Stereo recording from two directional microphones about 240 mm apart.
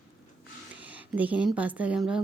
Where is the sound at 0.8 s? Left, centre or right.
Centre.